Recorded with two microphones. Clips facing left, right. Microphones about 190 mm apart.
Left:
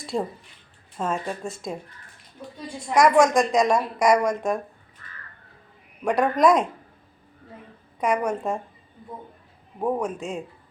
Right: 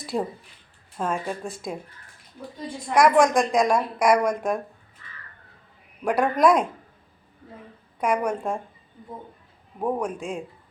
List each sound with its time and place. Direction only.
0.0 s a sound: centre (ahead or behind)
0.9 s a woman's voice: centre (ahead or behind)
2.9 s a woman's voice: centre (ahead or behind)
5.0 s crow: 50° left (ahead or behind)
6.1 s a woman's voice: centre (ahead or behind)
7.9 s a woman's voice: centre (ahead or behind)
9.8 s a woman's voice: centre (ahead or behind)